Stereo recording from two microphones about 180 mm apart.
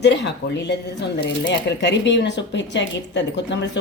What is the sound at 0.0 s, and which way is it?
Speech, 75° left (ahead or behind).